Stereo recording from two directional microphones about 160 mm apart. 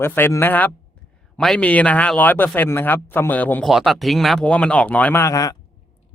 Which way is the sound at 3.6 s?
Centre (ahead or behind).